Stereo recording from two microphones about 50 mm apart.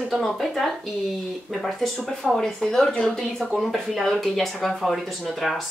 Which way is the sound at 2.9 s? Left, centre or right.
Centre.